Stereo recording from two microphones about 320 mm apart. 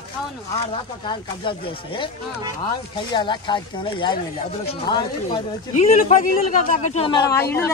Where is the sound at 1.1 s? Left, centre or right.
Centre.